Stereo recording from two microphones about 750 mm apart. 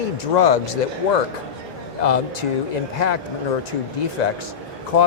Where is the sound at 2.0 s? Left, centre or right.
Left.